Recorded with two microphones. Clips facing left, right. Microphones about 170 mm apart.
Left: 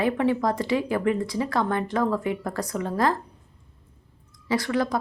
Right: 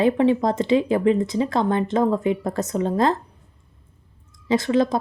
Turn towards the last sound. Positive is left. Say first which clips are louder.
# right 5 dB
turn(degrees=-25)  # may be behind; listen again after turning